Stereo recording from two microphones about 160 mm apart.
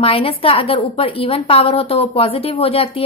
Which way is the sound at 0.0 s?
35° left (ahead or behind).